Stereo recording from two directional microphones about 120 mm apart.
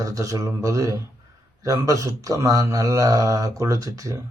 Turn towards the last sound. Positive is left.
turn(degrees=-30)  # may be behind; listen again after turning